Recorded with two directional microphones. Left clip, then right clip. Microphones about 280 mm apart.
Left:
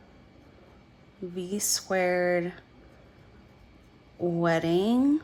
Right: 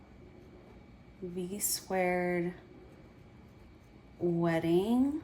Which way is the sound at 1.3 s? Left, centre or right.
Centre.